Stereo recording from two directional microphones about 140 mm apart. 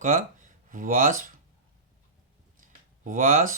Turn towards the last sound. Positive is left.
turn(degrees=-70)  # may be behind; listen again after turning